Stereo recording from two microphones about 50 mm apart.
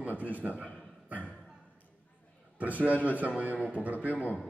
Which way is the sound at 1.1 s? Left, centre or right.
Left.